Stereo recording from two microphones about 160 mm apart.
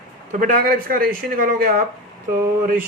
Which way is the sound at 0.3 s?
60° right (ahead or behind).